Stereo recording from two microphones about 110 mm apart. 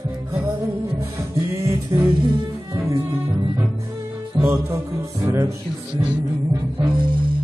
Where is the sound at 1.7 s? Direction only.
30° right (ahead or behind).